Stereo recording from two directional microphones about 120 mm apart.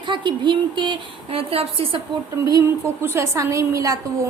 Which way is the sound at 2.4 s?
25° right (ahead or behind).